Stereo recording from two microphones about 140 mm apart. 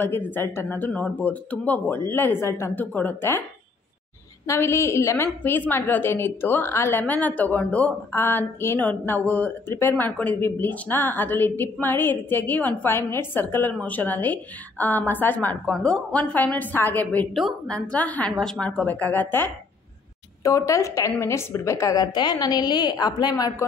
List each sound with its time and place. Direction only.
0.0 s a woman's voice: 15° left (ahead or behind)
4.5 s a woman's voice: 20° left (ahead or behind)